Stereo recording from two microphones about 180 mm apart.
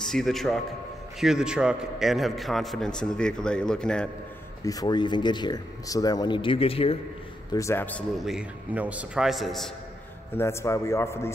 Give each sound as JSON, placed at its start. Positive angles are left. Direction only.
{"t": 0.0, "sound": "a man's voice", "side_deg": 0}
{"t": 4.6, "sound": "speech", "side_deg": 20}
{"t": 7.5, "sound": "a man's voice", "side_deg": 15}
{"t": 8.3, "sound": "a man's voice", "side_deg": -5}
{"t": 10.3, "sound": "a man's voice", "side_deg": 15}